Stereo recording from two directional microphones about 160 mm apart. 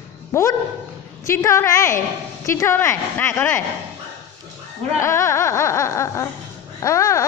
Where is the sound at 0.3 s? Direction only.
20° left (ahead or behind).